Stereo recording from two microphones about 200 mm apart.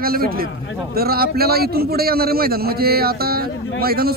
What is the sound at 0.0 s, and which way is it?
A man's voice, 50° right (ahead or behind).